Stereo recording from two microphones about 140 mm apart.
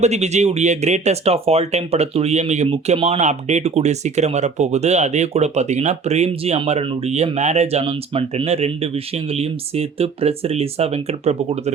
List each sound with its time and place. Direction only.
0.0 s speech: 55° right (ahead or behind)